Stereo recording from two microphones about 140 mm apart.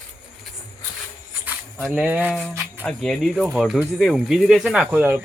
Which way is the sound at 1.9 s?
10° right (ahead or behind).